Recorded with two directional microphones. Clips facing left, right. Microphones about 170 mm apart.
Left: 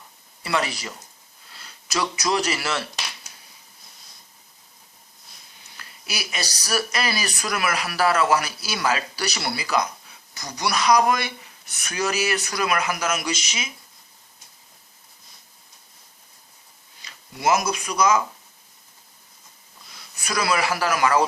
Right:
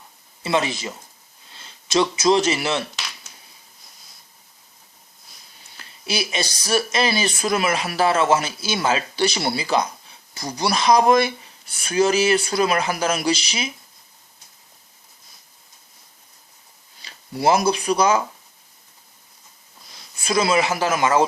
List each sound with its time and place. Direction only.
0.4 s speech: 20° right (ahead or behind)
5.7 s speech: 25° right (ahead or behind)
17.0 s speech: 30° right (ahead or behind)
20.1 s speech: 25° right (ahead or behind)